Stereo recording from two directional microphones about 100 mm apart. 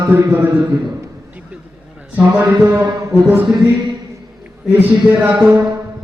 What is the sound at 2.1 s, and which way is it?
Speech, 15° right (ahead or behind).